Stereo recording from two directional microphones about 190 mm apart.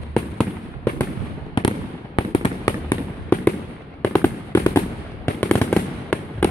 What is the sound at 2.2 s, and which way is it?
Fireworks, 25° left (ahead or behind).